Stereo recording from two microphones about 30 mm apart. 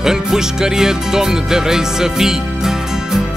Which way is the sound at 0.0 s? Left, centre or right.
Centre.